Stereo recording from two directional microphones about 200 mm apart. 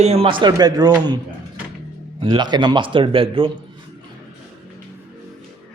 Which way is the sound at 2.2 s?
20° right (ahead or behind).